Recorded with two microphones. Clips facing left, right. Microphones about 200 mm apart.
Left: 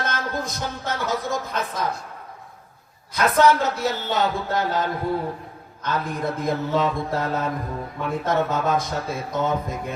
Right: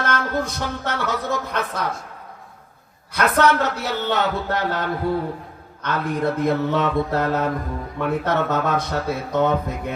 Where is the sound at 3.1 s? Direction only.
70° right (ahead or behind).